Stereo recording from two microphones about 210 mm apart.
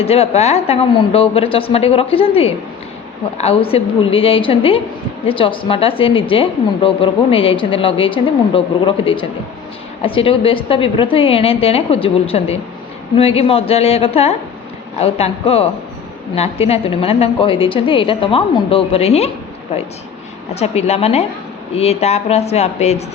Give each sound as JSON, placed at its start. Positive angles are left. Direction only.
{"t": 0.0, "sound": "a woman's voice", "side_deg": 30}
{"t": 20.6, "sound": "speech", "side_deg": 30}